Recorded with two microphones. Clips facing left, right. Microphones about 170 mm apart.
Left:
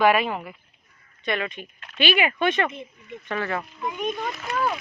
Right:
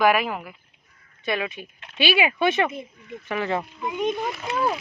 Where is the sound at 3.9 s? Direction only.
20° right (ahead or behind).